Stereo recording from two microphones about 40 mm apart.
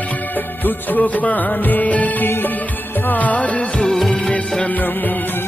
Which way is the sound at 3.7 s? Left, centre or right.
Centre.